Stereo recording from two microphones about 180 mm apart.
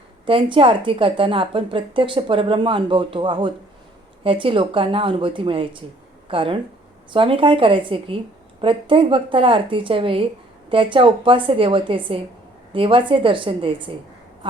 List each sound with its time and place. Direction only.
0.3 s a woman's voice: 30° right (ahead or behind)